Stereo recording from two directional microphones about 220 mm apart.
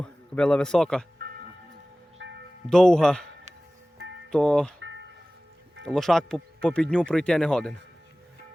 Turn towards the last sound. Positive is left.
turn(degrees=5)  # may be behind; listen again after turning